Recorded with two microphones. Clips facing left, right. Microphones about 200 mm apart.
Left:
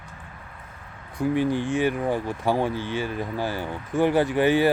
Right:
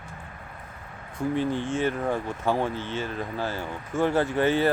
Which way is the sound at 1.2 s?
10° left (ahead or behind).